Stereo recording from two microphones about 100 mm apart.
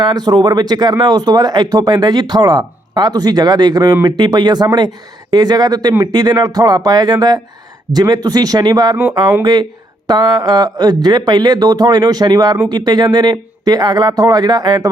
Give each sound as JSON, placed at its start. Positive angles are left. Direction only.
{"t": 0.0, "sound": "speech", "side_deg": -45}